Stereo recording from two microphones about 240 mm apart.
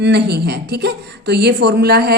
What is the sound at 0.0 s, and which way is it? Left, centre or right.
A woman's voice, right.